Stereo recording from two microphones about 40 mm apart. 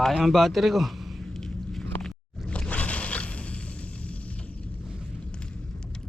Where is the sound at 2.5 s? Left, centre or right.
Left.